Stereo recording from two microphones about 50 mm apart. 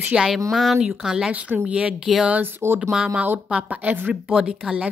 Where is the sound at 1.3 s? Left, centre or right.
Right.